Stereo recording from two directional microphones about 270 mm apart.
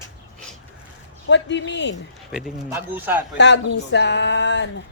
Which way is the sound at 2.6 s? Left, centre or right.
Centre.